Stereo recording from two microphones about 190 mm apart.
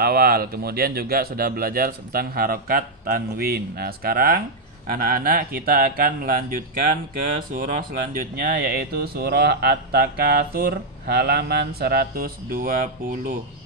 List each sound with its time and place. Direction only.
0.0 s speech: 50° right (ahead or behind)